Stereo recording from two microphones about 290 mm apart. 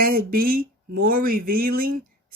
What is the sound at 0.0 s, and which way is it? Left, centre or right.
Speech, right.